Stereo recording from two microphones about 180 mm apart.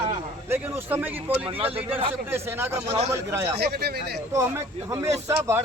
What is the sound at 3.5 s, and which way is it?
Speech, 65° right (ahead or behind).